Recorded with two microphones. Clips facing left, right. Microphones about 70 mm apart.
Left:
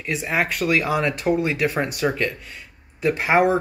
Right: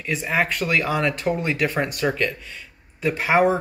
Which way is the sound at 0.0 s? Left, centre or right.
Centre.